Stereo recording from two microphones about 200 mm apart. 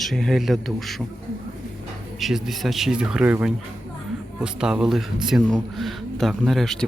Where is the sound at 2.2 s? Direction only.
Centre (ahead or behind).